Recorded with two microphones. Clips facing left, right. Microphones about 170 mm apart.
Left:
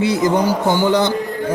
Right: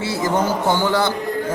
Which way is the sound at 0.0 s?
20° left (ahead or behind).